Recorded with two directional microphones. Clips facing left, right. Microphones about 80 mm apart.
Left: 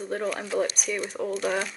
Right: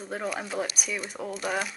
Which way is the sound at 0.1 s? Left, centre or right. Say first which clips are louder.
Left 3 dB; centre.